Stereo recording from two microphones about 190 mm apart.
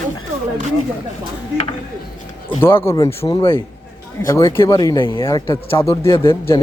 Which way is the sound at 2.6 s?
10° left (ahead or behind).